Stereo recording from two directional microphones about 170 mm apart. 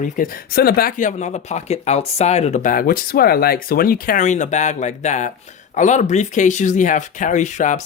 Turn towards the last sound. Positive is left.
turn(degrees=45)  # may be behind; listen again after turning